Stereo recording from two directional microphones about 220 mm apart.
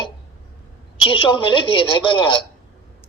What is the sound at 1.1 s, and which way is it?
Speech, 25° left (ahead or behind).